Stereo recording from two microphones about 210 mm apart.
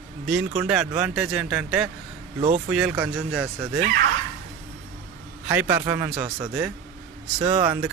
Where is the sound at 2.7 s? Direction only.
5° right (ahead or behind).